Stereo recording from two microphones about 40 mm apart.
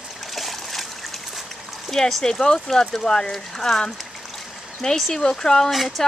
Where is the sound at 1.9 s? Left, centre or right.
Centre.